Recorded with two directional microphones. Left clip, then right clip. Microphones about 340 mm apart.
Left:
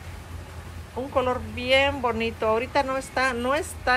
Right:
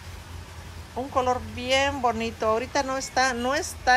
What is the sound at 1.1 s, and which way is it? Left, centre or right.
A woman's voice, centre.